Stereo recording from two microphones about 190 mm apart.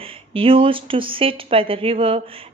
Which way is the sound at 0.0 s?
30° right (ahead or behind).